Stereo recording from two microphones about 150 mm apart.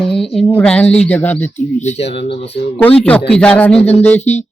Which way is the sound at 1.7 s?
45° left (ahead or behind).